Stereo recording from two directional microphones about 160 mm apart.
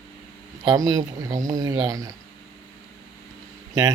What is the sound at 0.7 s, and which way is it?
Speech, 20° right (ahead or behind).